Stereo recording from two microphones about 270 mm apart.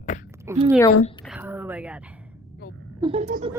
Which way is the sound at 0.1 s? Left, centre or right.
Left.